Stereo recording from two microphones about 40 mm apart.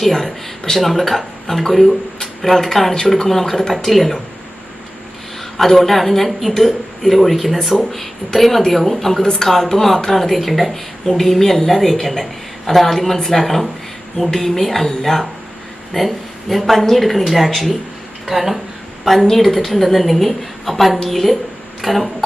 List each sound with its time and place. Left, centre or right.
0.0 s a woman's voice: centre
5.5 s speech: centre
9.2 s speech: centre
9.5 s a woman's voice: centre
21.8 s a sound: centre